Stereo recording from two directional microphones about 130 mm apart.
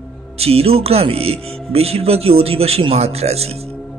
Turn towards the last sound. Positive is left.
turn(degrees=-50)  # may be behind; listen again after turning